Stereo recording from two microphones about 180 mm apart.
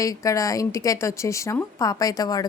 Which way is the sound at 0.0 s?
20° left (ahead or behind).